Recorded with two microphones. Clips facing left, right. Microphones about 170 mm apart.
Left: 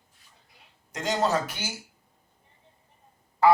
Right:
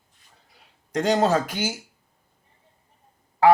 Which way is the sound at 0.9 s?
65° right (ahead or behind).